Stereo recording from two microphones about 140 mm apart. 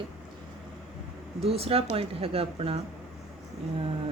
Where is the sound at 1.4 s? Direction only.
45° right (ahead or behind).